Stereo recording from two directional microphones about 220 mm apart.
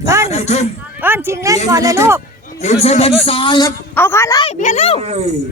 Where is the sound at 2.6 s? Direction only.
30° left (ahead or behind); by 4.4 s 10° left (ahead or behind).